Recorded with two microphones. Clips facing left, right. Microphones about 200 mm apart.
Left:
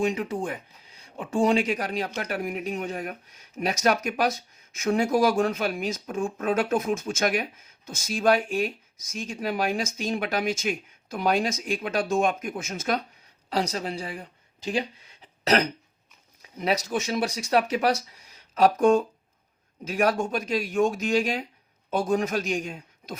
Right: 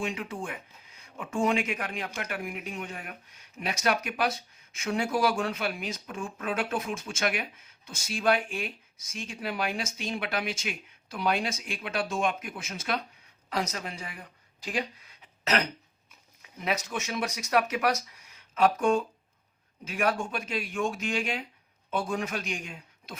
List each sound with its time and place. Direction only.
0.0 s speech: 40° left (ahead or behind)
13.5 s a man's voice: 30° left (ahead or behind)